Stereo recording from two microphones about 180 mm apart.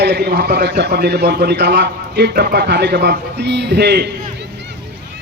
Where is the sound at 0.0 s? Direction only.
65° right (ahead or behind).